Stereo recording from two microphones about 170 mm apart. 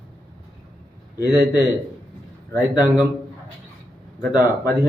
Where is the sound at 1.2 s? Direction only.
20° left (ahead or behind).